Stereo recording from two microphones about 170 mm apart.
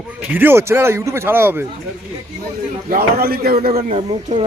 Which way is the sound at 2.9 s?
60° right (ahead or behind).